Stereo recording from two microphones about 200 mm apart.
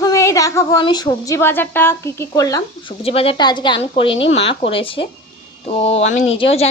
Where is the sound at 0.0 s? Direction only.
15° left (ahead or behind).